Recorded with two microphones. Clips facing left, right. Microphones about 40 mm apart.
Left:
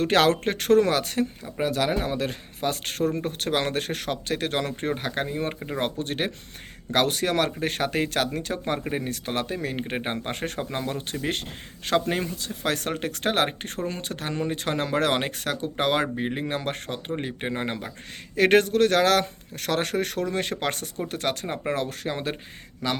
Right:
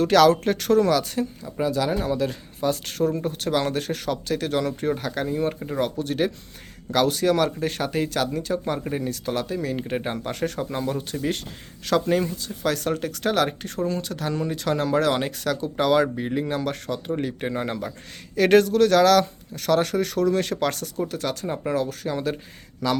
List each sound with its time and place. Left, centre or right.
0.0 s speech: left
11.9 s speech: left
20.2 s speech: left
21.1 s speech: left
22.8 s speech: left